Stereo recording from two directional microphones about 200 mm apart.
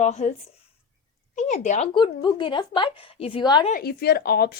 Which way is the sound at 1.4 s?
35° left (ahead or behind).